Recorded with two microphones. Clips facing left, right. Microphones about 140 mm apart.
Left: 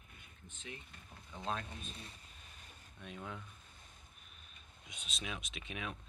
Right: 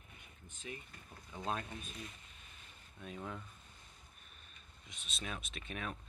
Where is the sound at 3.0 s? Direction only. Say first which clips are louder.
Right 2 dB; centre (ahead or behind).